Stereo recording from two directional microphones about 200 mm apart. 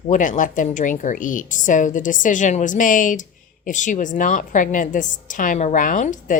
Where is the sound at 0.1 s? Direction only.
40° left (ahead or behind).